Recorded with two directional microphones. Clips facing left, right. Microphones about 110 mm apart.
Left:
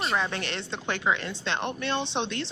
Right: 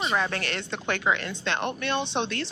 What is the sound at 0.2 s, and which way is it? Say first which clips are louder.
Speech: right 2 dB; 25° left (ahead or behind).